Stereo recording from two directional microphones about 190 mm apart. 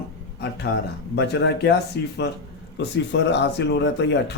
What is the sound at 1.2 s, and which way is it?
Speech, 65° left (ahead or behind).